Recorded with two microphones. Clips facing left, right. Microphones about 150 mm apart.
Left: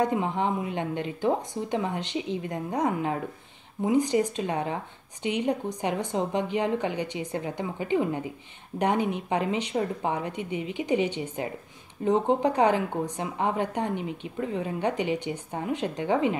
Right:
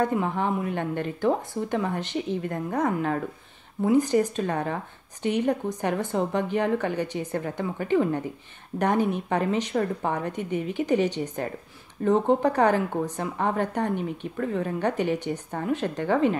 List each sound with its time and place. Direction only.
0.0 s speech: 15° left (ahead or behind)